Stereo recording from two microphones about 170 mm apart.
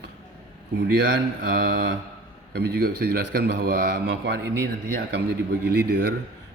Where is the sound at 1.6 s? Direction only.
65° right (ahead or behind); by 4.5 s 85° right.